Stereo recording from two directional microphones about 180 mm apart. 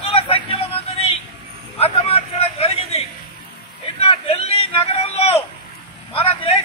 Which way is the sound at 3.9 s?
35° left (ahead or behind).